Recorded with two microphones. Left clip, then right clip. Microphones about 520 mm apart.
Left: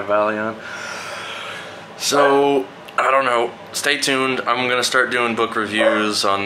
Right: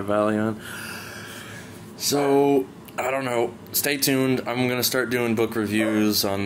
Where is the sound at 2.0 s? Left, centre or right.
Right.